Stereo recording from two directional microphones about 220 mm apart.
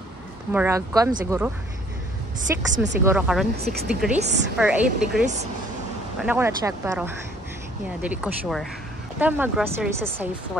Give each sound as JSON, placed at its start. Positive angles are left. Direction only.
{"t": 0.5, "sound": "a woman's voice", "side_deg": -10}
{"t": 4.2, "sound": "a woman's voice", "side_deg": -50}
{"t": 4.6, "sound": "a woman's voice", "side_deg": -5}
{"t": 6.2, "sound": "speech", "side_deg": -10}